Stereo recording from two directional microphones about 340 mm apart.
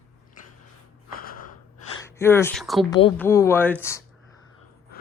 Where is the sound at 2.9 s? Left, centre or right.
Centre.